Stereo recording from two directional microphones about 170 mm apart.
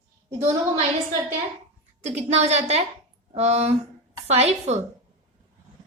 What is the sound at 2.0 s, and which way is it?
A woman's voice, 40° right (ahead or behind).